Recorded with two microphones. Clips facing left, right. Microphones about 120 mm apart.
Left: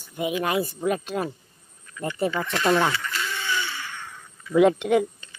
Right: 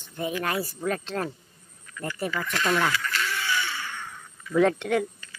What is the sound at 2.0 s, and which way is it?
Speech, 25° left (ahead or behind).